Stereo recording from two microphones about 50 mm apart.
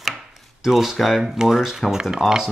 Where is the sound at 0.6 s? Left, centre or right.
Centre.